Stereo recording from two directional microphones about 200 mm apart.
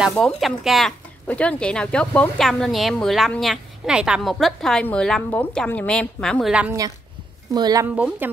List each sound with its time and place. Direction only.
0.0 s speech: centre (ahead or behind)
7.5 s a woman's voice: 20° right (ahead or behind)
7.9 s speech: 5° right (ahead or behind)